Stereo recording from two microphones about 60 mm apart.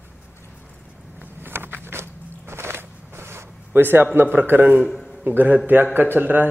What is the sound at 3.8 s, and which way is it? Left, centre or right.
Speech, right.